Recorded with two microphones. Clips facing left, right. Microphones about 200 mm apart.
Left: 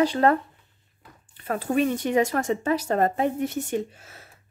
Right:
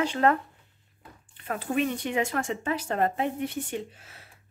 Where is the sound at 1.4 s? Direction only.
40° left (ahead or behind).